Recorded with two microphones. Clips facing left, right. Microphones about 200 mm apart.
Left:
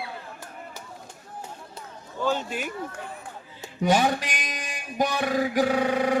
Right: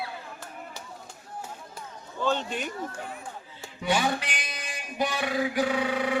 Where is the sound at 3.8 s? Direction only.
45° left (ahead or behind).